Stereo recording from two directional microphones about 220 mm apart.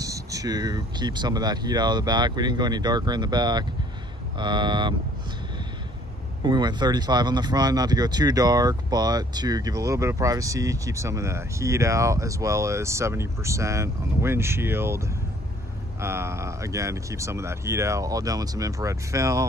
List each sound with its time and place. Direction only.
0.0 s speech: 15° right (ahead or behind)
6.4 s speech: 20° right (ahead or behind)